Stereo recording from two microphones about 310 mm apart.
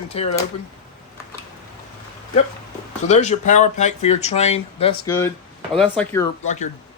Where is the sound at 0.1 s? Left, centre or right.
Centre.